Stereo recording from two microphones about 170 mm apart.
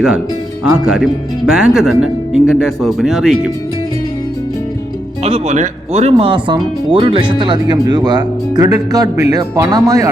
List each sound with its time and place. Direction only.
0.9 s speech: 5° right (ahead or behind)
5.2 s speech: 40° right (ahead or behind); by 10.1 s 20° right (ahead or behind)